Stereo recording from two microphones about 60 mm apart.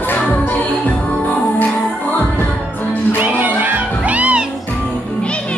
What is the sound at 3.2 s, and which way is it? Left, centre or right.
Music, right.